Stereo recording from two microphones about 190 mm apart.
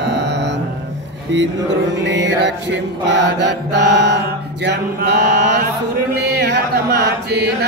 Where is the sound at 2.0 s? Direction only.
65° right (ahead or behind).